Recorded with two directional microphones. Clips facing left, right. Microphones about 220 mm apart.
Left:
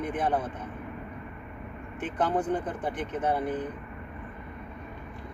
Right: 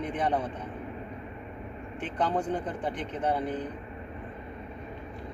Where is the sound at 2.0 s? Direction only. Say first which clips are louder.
Left 1 dB; 5° left (ahead or behind).